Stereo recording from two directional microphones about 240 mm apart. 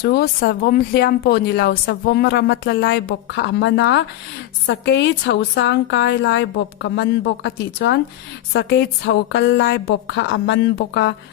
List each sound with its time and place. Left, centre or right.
0.0 s speech: left